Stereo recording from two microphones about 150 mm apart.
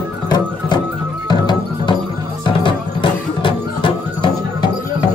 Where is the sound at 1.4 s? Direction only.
30° left (ahead or behind).